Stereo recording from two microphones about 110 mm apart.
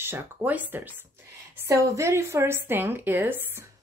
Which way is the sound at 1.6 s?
25° right (ahead or behind).